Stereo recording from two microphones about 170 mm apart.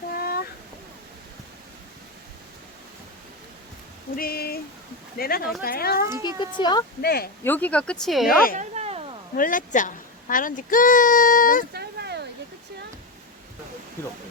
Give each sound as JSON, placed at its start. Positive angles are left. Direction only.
{"t": 0.2, "sound": "a sound", "side_deg": 60}
{"t": 4.1, "sound": "speech", "side_deg": 60}
{"t": 6.0, "sound": "speech", "side_deg": -15}
{"t": 6.6, "sound": "speech", "side_deg": 25}
{"t": 7.0, "sound": "speech", "side_deg": 65}
{"t": 7.4, "sound": "speech", "side_deg": 10}
{"t": 8.5, "sound": "a sound", "side_deg": -40}
{"t": 9.3, "sound": "a child's voice", "side_deg": 55}
{"t": 11.7, "sound": "a sound", "side_deg": -75}